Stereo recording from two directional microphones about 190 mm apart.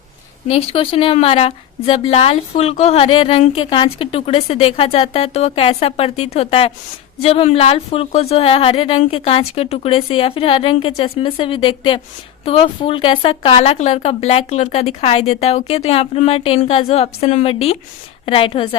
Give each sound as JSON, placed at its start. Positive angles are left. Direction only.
{"t": 0.4, "sound": "a woman's voice", "side_deg": 30}